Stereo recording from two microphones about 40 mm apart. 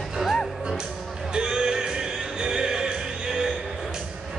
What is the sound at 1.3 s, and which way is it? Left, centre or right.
Music, centre.